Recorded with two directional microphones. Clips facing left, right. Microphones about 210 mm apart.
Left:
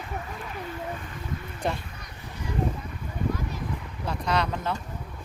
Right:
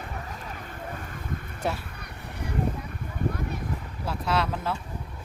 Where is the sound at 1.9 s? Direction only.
60° right (ahead or behind).